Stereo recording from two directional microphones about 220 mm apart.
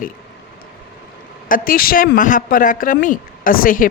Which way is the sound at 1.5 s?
40° left (ahead or behind).